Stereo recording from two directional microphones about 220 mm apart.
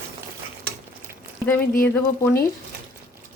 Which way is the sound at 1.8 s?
10° left (ahead or behind).